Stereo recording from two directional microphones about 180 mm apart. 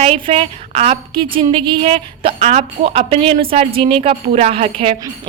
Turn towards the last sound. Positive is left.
turn(degrees=-30)  # may be behind; listen again after turning